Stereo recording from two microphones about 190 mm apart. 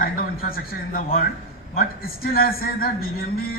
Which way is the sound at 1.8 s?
50° left (ahead or behind).